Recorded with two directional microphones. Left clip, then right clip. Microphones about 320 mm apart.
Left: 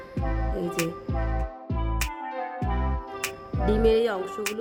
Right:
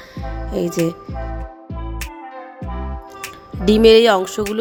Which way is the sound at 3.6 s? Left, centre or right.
Right.